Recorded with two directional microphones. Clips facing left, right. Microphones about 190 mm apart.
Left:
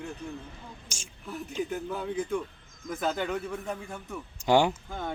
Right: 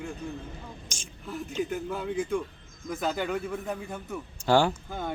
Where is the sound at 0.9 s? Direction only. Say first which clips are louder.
Right 1 dB; 10° left (ahead or behind).